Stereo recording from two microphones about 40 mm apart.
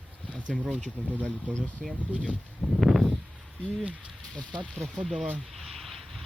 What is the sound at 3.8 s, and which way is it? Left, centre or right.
Speech, right.